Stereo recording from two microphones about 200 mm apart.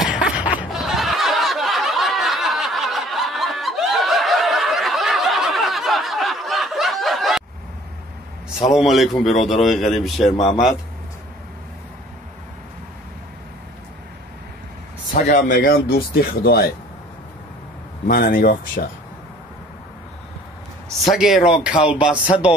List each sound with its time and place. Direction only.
0.0 s snicker: 5° right (ahead or behind)
8.6 s a man's voice: centre (ahead or behind)
10.3 s speech: 25° left (ahead or behind)
15.1 s speech: 40° left (ahead or behind)
18.0 s speech: 45° left (ahead or behind)
21.1 s a man's voice: centre (ahead or behind)